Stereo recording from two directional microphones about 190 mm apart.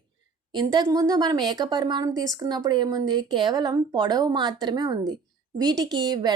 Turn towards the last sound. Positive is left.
turn(degrees=-20)  # may be behind; listen again after turning